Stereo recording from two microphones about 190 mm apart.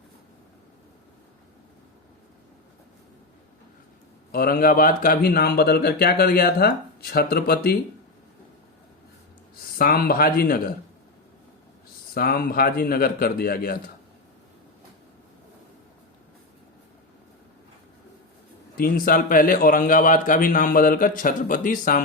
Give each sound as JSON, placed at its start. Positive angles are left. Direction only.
{"t": 4.3, "sound": "a man's voice", "side_deg": 50}
{"t": 9.7, "sound": "a man's voice", "side_deg": 55}
{"t": 12.1, "sound": "a man's voice", "side_deg": 55}
{"t": 18.8, "sound": "a man's voice", "side_deg": 50}